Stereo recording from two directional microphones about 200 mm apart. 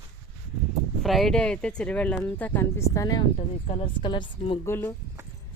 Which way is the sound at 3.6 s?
30° left (ahead or behind).